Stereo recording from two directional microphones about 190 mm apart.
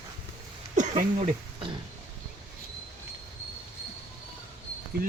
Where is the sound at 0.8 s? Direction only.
40° right (ahead or behind).